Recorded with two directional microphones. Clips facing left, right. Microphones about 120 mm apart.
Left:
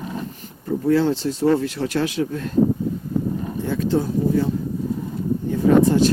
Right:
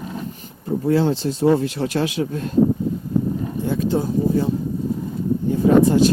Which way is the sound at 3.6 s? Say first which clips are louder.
Even; 15° right (ahead or behind).